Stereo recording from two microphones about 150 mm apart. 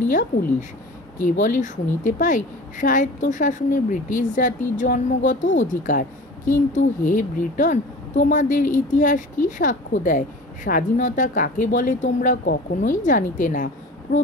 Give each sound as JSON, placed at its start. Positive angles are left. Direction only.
{"t": 0.1, "sound": "a woman's voice", "side_deg": 60}